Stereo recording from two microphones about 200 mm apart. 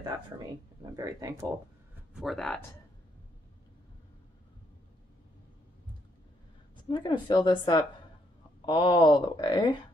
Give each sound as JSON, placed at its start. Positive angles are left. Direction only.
{"t": 0.9, "sound": "speech", "side_deg": -15}
{"t": 2.1, "sound": "speech", "side_deg": 0}
{"t": 6.9, "sound": "speech", "side_deg": 20}